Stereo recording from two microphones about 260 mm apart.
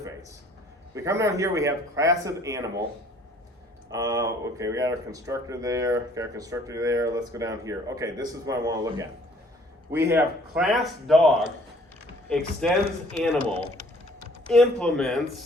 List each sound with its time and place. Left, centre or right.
0.9 s speech: centre
3.9 s speech: centre
10.1 s speech: centre
14.4 s speech: centre